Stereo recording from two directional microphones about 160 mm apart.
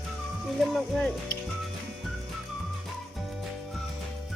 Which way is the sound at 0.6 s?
Centre (ahead or behind).